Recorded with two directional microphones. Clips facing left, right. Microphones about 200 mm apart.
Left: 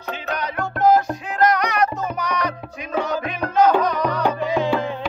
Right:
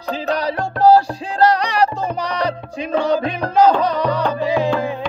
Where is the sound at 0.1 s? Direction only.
35° right (ahead or behind).